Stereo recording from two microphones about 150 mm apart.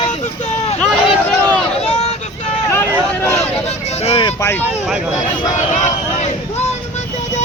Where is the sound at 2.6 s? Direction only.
15° left (ahead or behind).